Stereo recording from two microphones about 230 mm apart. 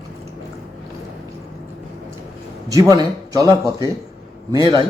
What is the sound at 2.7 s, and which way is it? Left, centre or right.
Speech, centre.